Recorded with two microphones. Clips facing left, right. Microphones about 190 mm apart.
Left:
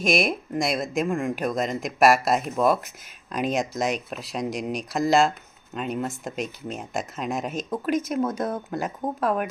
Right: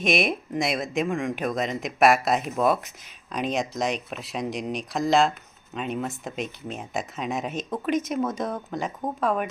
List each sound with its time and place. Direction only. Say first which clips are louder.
0.0 s speech: left 1 dB; centre (ahead or behind)